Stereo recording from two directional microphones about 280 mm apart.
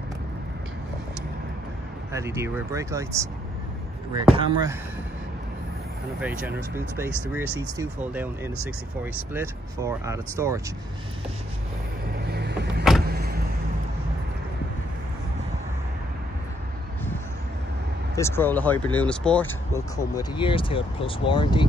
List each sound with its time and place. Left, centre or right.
2.1 s speech: centre
4.4 s speech: centre
6.1 s speech: centre
12.1 s vehicle: right
18.1 s speech: centre